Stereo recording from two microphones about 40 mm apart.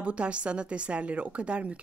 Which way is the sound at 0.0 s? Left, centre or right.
Right.